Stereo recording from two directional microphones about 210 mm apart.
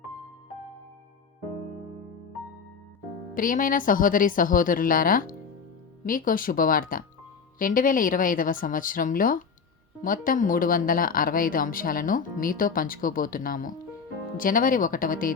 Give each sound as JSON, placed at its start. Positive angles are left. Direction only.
{"t": 3.3, "sound": "speech", "side_deg": 40}